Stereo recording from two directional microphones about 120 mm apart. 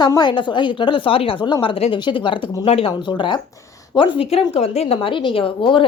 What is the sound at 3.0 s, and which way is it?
A woman's voice, 40° left (ahead or behind).